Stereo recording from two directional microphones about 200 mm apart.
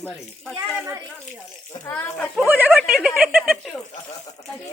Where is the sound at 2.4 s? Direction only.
10° right (ahead or behind).